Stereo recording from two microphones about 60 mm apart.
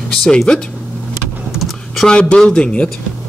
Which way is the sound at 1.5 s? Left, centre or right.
Centre.